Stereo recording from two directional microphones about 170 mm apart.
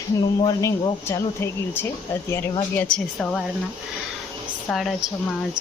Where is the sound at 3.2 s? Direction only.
Centre (ahead or behind).